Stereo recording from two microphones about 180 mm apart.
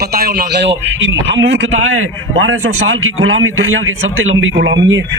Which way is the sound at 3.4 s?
90° right.